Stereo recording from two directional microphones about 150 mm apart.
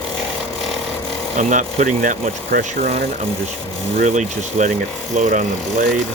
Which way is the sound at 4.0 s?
55° right (ahead or behind).